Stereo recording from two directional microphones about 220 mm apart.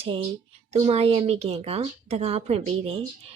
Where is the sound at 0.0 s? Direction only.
25° right (ahead or behind).